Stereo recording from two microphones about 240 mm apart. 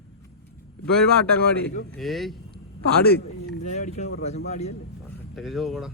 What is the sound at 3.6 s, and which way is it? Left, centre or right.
Speech, left.